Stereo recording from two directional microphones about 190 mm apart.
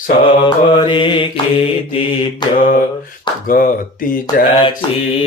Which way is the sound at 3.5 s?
50° left (ahead or behind).